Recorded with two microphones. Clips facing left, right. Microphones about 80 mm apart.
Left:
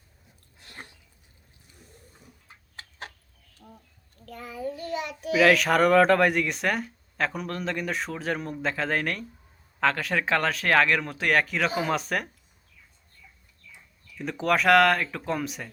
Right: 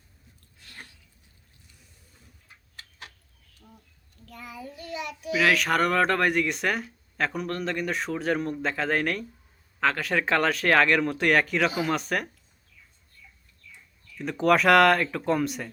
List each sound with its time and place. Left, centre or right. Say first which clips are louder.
0.6 s a sound: left 2 dB; left
4.3 s child singing: left 7 dB; left
5.3 s speech: left 3 dB; centre
14.2 s speech: right 3 dB; centre